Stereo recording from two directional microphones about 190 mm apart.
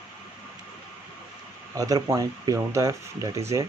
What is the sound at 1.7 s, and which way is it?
Speech, 20° right (ahead or behind).